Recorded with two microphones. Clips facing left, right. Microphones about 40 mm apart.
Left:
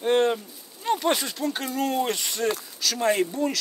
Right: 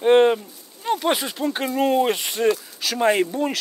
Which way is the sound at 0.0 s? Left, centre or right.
Right.